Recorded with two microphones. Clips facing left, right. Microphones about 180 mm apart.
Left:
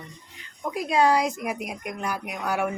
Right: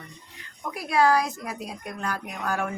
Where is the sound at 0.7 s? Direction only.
20° left (ahead or behind).